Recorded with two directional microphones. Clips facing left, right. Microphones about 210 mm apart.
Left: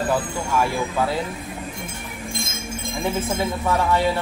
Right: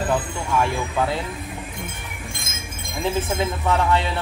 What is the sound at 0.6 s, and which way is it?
Music, 5° left (ahead or behind).